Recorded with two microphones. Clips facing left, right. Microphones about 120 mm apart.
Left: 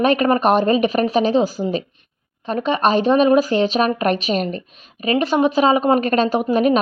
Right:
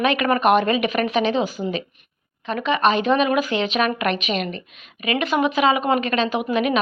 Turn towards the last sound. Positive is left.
turn(degrees=40)  # may be behind; listen again after turning